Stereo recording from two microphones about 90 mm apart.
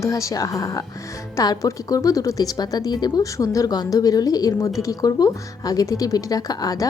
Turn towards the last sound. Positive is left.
turn(degrees=45)  # may be behind; listen again after turning